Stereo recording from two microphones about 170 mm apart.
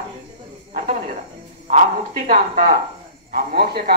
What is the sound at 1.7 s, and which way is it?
Speech, 50° right (ahead or behind).